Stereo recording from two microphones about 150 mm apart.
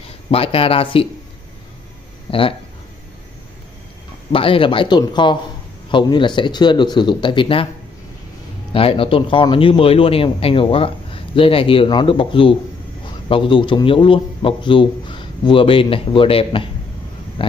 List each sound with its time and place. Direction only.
0.3 s a man's voice: 40° left (ahead or behind)
2.3 s a man's voice: 40° left (ahead or behind)
4.3 s a man's voice: 35° left (ahead or behind)
8.7 s a man's voice: 40° left (ahead or behind)